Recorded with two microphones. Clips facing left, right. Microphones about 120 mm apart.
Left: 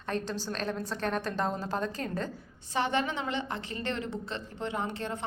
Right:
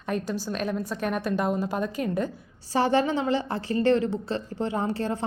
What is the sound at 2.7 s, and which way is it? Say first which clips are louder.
A woman's voice: right 7 dB; 35° right (ahead or behind).